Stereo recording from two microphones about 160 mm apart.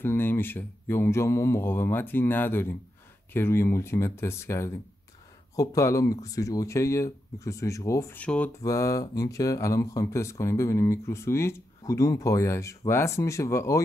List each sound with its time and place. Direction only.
0.0 s speech: 15° left (ahead or behind)
8.6 s speech: 20° left (ahead or behind)